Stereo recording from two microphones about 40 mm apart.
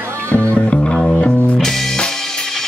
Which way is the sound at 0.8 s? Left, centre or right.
Left.